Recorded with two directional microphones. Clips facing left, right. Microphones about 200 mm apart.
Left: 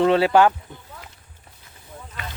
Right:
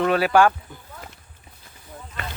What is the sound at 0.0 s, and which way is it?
Speech, 25° left (ahead or behind).